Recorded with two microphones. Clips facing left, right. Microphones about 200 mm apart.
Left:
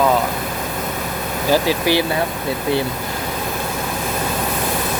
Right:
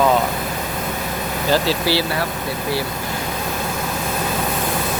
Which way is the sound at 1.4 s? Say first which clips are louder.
Left 2 dB; 15° left (ahead or behind).